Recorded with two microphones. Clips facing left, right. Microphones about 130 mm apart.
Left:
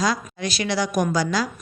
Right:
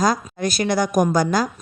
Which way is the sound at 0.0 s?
45° right (ahead or behind).